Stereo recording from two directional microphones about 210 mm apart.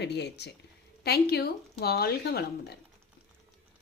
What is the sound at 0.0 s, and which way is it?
Speech, 55° left (ahead or behind).